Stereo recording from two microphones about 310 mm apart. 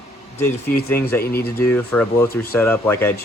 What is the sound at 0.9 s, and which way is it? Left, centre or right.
Speech, centre.